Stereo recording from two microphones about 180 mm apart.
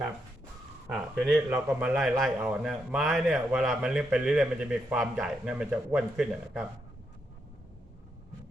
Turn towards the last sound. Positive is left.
turn(degrees=-5)  # may be behind; listen again after turning